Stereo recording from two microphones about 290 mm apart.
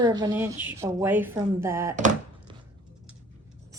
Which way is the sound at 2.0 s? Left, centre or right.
Right.